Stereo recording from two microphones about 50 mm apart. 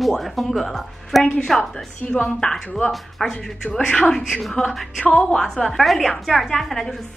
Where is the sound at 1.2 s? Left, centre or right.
Centre.